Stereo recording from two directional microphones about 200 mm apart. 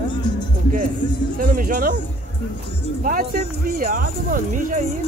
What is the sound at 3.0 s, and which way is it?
Speech, 45° right (ahead or behind).